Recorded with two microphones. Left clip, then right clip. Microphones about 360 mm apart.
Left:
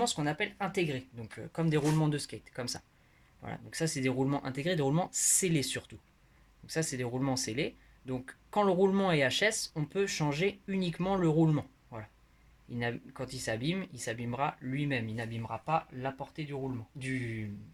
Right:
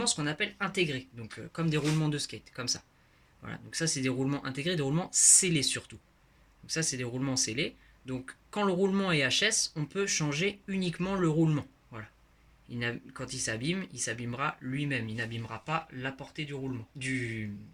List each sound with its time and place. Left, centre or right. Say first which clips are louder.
0.0 s speech: even; centre